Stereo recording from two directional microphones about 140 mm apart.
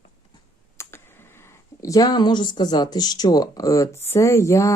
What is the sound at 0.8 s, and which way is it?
Computer keyboard, 20° left (ahead or behind).